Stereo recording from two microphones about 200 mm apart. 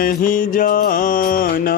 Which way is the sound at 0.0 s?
45° left (ahead or behind).